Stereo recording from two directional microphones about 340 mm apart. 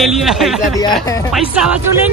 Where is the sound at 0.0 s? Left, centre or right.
Centre.